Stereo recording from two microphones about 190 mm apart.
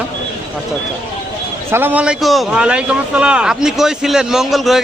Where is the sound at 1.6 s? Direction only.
10° right (ahead or behind).